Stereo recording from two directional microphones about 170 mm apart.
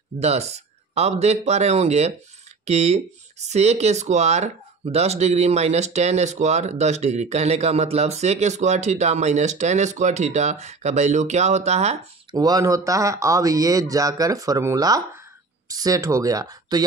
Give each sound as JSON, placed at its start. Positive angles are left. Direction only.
{"t": 0.2, "sound": "speech", "side_deg": -40}
{"t": 12.4, "sound": "speech", "side_deg": -20}